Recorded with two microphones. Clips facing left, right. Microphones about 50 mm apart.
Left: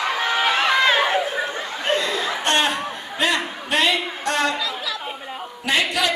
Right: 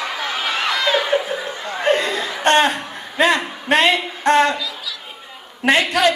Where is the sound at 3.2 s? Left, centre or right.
Right.